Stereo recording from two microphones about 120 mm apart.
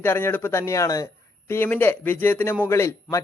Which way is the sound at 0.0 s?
20° left (ahead or behind).